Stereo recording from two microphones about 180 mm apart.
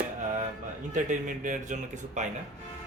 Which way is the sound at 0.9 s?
45° right (ahead or behind).